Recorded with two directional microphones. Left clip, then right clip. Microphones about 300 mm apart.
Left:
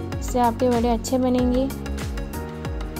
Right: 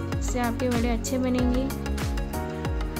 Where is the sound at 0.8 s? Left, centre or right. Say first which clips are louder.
Left 6 dB; centre.